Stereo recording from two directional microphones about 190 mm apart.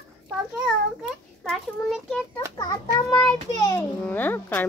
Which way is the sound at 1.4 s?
Centre (ahead or behind).